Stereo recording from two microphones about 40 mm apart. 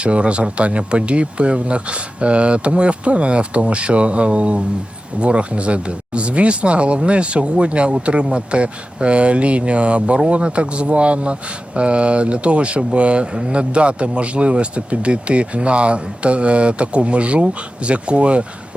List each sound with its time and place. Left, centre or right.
0.0 s speech: right